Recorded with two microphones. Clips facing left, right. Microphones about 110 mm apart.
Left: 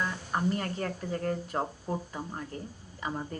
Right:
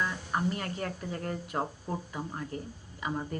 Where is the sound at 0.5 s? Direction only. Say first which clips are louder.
Left 2 dB; 40° left (ahead or behind).